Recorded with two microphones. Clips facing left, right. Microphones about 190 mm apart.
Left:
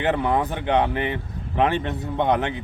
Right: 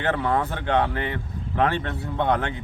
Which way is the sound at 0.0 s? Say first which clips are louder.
Left 2 dB; 15° left (ahead or behind).